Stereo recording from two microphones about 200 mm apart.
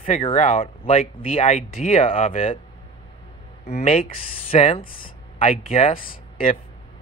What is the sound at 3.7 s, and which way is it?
Speech, 30° left (ahead or behind).